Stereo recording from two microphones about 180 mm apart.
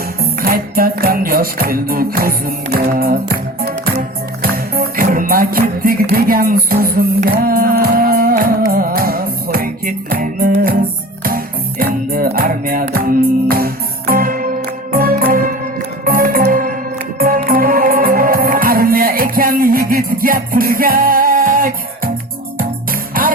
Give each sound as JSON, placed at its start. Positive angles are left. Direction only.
{"t": 0.2, "sound": "music", "side_deg": -55}